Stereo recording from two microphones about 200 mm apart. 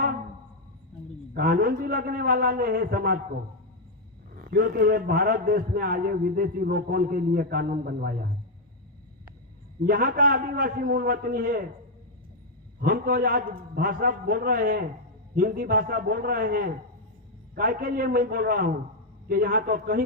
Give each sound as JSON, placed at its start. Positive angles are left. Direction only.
{"t": 1.3, "sound": "a man's voice", "side_deg": -50}
{"t": 4.4, "sound": "a man's voice", "side_deg": -50}
{"t": 9.8, "sound": "a man's voice", "side_deg": -45}
{"t": 12.8, "sound": "a man's voice", "side_deg": -45}